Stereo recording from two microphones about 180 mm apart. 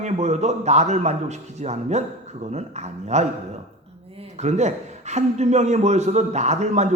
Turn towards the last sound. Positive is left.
turn(degrees=-40)  # may be behind; listen again after turning